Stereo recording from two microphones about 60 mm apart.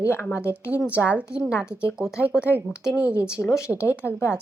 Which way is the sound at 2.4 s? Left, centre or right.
Left.